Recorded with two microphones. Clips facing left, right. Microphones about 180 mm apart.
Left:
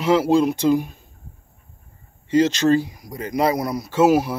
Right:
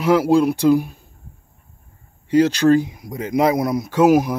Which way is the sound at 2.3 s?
10° right (ahead or behind).